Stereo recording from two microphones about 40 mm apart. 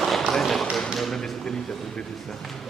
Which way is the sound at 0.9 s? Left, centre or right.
Centre.